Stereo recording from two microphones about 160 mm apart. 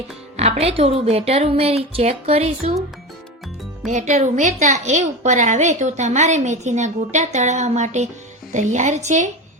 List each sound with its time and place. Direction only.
0.6 s speech: 40° right (ahead or behind)
3.8 s a woman's voice: 50° right (ahead or behind)